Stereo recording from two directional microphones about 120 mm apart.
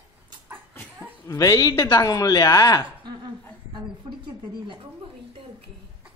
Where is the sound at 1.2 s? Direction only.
30° left (ahead or behind).